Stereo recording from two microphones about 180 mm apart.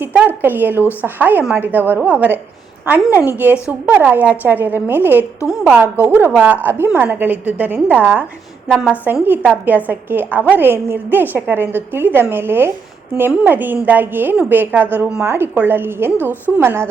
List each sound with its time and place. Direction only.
0.0 s a woman's voice: 10° right (ahead or behind)